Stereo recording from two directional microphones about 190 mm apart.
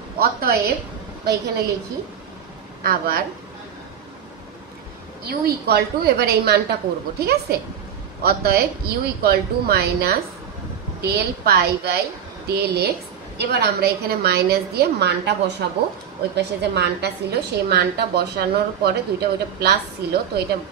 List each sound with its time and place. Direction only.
0.2 s a woman's voice: 55° right (ahead or behind)
2.8 s a woman's voice: 50° right (ahead or behind)
5.2 s a woman's voice: 55° right (ahead or behind)